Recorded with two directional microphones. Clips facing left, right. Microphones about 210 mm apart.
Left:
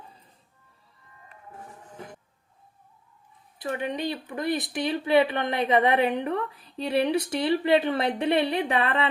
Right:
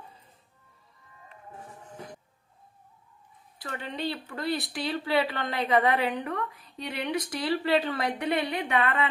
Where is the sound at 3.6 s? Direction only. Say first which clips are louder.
Left 5 dB; 15° left (ahead or behind).